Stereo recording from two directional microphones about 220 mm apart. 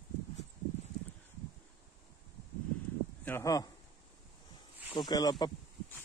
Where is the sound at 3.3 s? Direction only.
15° left (ahead or behind).